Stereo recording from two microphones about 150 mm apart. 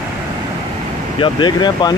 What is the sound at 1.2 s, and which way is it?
Speech, 30° left (ahead or behind).